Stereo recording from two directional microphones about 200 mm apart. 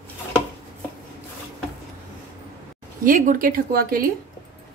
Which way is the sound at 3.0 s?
40° right (ahead or behind).